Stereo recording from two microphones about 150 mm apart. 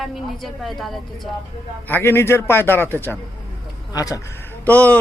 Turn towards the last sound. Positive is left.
turn(degrees=10)  # may be behind; listen again after turning